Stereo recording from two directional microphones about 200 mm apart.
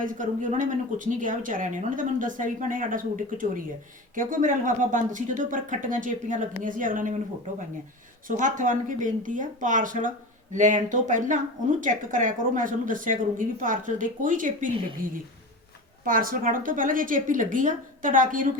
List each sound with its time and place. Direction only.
0.0 s speech: 40° right (ahead or behind)
8.4 s speech: 40° right (ahead or behind)
14.7 s speech: 25° right (ahead or behind)
16.0 s speech: 45° right (ahead or behind)